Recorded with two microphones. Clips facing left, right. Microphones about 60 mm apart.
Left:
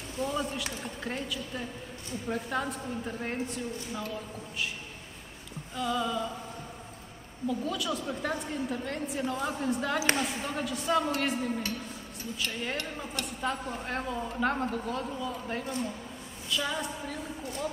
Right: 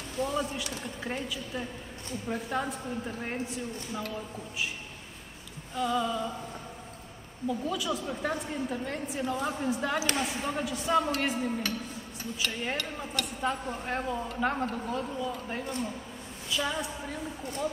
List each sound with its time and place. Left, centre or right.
0.2 s a woman's voice: centre
5.8 s a woman's voice: centre
7.4 s a woman's voice: centre
12.7 s speech: right
13.3 s a woman's voice: centre